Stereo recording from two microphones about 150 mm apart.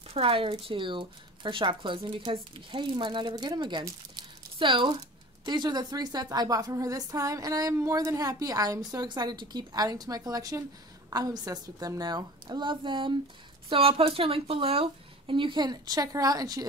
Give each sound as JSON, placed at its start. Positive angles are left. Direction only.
{"t": 0.1, "sound": "a woman's voice", "side_deg": -35}